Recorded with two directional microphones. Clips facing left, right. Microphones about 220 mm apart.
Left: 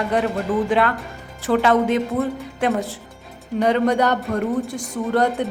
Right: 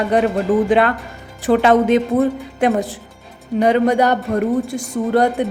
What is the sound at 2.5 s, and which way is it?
A woman's voice, 15° right (ahead or behind).